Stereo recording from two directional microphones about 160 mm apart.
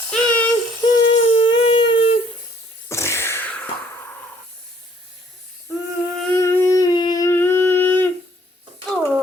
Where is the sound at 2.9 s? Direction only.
15° left (ahead or behind).